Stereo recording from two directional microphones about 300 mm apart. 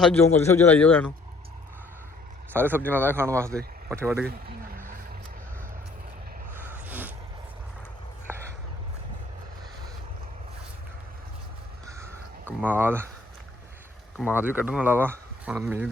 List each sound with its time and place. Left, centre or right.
0.3 s speech: centre
2.5 s speech: centre
4.3 s vehicle: right
6.8 s a sound: centre
11.9 s a sound: centre
14.2 s speech: centre